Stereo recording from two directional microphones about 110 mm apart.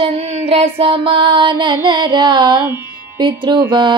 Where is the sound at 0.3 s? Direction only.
65° right (ahead or behind).